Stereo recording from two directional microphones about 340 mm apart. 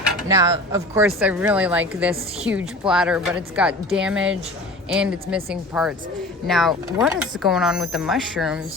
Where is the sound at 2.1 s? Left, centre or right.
Centre.